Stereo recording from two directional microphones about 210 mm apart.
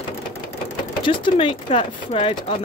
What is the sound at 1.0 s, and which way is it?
Speech, 25° left (ahead or behind).